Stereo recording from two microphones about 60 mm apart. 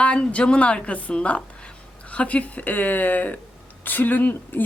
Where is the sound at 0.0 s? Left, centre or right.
Centre.